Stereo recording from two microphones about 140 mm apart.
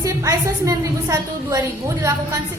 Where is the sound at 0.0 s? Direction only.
25° right (ahead or behind).